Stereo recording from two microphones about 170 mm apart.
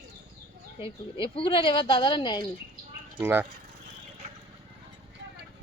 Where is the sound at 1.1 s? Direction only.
30° left (ahead or behind).